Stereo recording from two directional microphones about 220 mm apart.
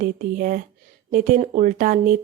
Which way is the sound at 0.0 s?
40° right (ahead or behind).